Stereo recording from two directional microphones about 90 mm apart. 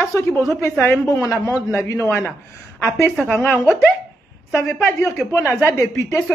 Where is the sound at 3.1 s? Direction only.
5° left (ahead or behind).